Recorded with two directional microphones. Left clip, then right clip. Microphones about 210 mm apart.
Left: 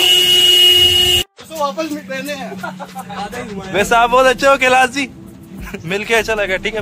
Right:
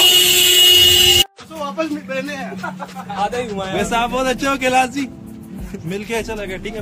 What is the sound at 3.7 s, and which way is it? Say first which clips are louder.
A man's voice: left 8 dB; 15° left (ahead or behind).